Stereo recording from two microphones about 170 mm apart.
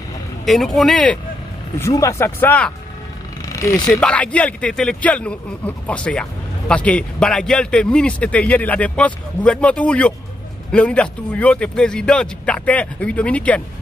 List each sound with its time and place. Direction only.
0.5 s speech: centre (ahead or behind)
1.8 s speech: 15° left (ahead or behind)
3.4 s vehicle: 20° left (ahead or behind)
3.9 s speech: 5° left (ahead or behind)